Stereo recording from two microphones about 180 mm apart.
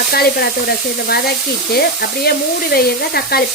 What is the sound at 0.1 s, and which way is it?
Speech, 60° left (ahead or behind).